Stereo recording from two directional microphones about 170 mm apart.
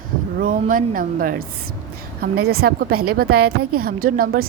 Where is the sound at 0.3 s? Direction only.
55° right (ahead or behind).